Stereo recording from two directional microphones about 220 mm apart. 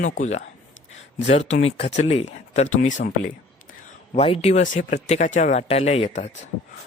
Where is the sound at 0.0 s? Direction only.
35° left (ahead or behind).